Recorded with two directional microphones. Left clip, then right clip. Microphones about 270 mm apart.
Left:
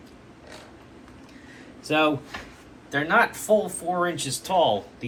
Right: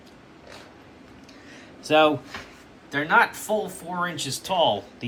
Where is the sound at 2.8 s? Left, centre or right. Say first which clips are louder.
Right 1 dB; centre.